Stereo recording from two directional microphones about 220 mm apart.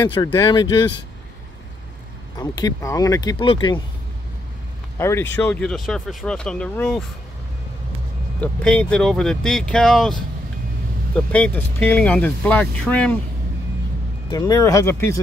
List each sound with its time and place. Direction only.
0.1 s speech: 15° left (ahead or behind)
2.3 s speech: 15° left (ahead or behind)
4.9 s speech: 10° left (ahead or behind)
8.4 s speech: 5° left (ahead or behind)
11.3 s speech: 5° left (ahead or behind)
14.3 s speech: 15° left (ahead or behind)